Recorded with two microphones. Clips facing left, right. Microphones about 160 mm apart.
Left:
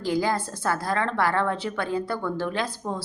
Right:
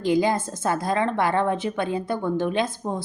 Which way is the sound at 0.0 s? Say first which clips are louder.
Right 4 dB; 20° right (ahead or behind).